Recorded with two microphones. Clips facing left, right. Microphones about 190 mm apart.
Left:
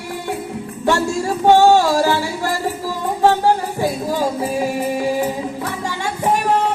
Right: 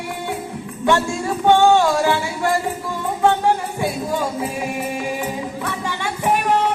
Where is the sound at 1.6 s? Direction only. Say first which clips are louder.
Left 2 dB; 40° left (ahead or behind).